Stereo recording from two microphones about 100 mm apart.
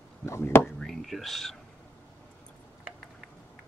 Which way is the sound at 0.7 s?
5° left (ahead or behind).